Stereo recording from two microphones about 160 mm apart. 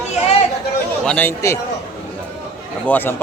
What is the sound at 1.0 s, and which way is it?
Speech, 10° left (ahead or behind).